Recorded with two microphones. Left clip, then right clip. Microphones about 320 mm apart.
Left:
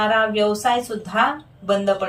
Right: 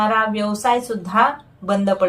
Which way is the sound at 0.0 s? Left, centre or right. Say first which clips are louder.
Left 1 dB; centre.